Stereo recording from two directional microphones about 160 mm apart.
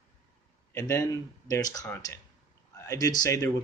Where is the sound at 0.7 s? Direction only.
15° left (ahead or behind).